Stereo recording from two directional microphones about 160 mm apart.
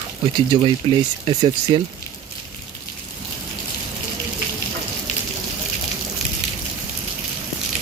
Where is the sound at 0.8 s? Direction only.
35° right (ahead or behind).